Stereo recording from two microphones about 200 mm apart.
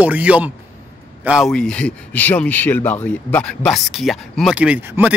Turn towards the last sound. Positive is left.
turn(degrees=-5)  # may be behind; listen again after turning